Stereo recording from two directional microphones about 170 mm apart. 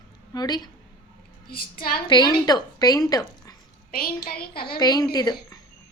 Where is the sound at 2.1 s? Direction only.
25° left (ahead or behind).